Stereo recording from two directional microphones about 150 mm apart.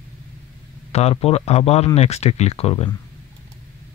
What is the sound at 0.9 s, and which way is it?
Speech, 45° left (ahead or behind).